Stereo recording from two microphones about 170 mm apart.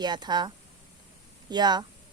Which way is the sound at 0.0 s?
25° right (ahead or behind).